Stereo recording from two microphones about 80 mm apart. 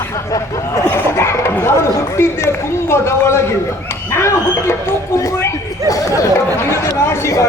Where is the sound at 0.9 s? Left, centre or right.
Left.